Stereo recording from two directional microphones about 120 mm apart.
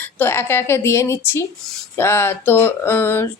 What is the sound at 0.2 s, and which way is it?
Speech, 20° left (ahead or behind).